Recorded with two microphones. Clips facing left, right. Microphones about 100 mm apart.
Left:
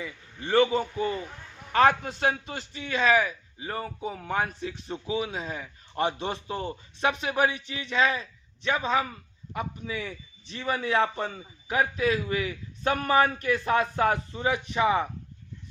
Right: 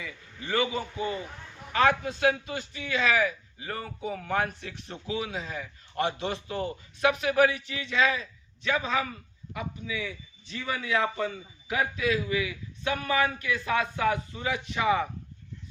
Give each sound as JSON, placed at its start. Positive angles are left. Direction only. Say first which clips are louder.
{"t": 0.0, "sound": "a man's voice", "louder": "left 3 dB", "side_deg": 30}
{"t": 14.4, "sound": "a man's voice", "louder": "left 3 dB", "side_deg": 30}